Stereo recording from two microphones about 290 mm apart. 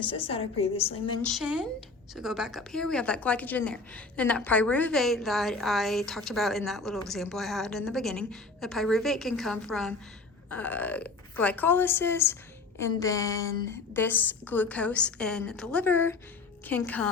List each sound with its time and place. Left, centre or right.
0.1 s a woman's voice: centre
1.2 s a woman's voice: centre